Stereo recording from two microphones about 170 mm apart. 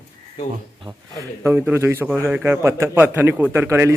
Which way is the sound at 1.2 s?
15° right (ahead or behind).